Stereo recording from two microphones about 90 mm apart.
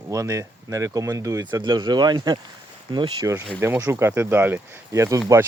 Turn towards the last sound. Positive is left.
turn(degrees=-40)  # may be behind; listen again after turning